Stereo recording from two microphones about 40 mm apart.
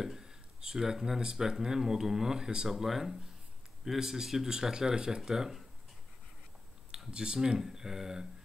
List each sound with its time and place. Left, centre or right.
0.0 s speech: centre
7.1 s speech: right
7.3 s speech: centre